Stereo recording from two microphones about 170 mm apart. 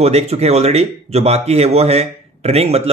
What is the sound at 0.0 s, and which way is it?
Speech, 40° right (ahead or behind).